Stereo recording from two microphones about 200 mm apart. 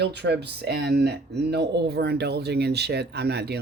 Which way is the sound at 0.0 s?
55° right (ahead or behind).